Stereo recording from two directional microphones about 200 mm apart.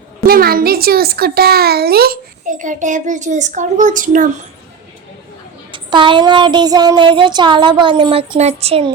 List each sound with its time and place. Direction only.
0.3 s a child's voice: 50° right (ahead or behind)
5.9 s child singing: 25° right (ahead or behind)